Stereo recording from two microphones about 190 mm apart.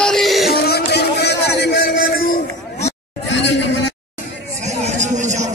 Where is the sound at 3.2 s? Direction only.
65° left (ahead or behind).